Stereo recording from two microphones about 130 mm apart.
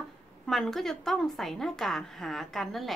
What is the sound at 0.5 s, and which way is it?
A woman's voice, centre (ahead or behind).